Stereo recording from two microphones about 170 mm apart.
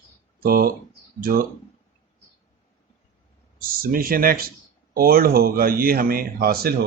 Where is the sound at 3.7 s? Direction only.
60° right (ahead or behind).